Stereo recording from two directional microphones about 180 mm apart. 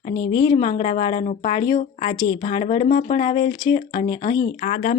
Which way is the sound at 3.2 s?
30° left (ahead or behind).